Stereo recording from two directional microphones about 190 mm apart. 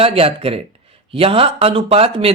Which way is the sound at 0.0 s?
30° right (ahead or behind).